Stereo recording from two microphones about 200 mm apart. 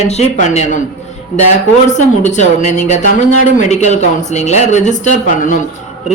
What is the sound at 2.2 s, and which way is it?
A man's voice, 35° left (ahead or behind).